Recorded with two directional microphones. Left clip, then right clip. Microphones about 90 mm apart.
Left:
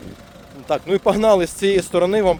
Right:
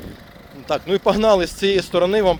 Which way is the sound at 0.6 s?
45° left (ahead or behind).